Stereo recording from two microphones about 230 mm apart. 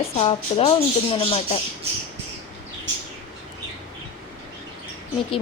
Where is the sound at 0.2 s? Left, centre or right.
Left.